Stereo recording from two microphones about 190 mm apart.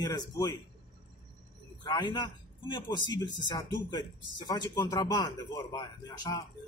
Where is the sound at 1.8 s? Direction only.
20° left (ahead or behind).